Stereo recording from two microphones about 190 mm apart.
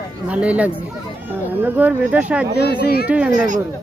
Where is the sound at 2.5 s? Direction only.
55° left (ahead or behind).